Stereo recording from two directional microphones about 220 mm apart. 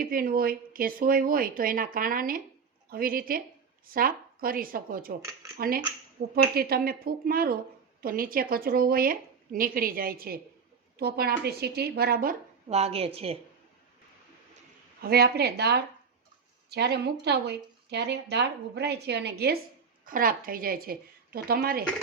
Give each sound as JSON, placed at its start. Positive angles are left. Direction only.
{"t": 0.0, "sound": "speech", "side_deg": -40}
{"t": 12.6, "sound": "a woman's voice", "side_deg": -30}
{"t": 15.0, "sound": "speech", "side_deg": -45}